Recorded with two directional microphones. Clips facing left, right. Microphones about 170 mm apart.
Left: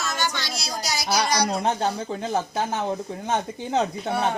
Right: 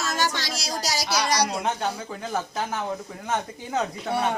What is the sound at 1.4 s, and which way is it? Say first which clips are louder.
Speech: left 3 dB; 30° left (ahead or behind).